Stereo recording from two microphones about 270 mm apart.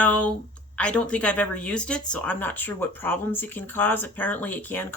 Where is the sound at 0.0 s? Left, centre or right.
Centre.